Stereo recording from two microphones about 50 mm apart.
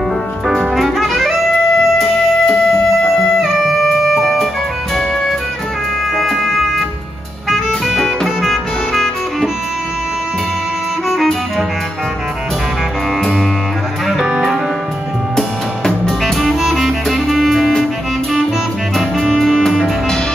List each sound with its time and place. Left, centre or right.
0.5 s music: centre
3.3 s music: centre
6.1 s music: centre
15.3 s music: centre
18.9 s music: centre